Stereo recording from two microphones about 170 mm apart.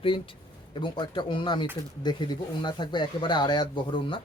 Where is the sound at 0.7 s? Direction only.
25° left (ahead or behind).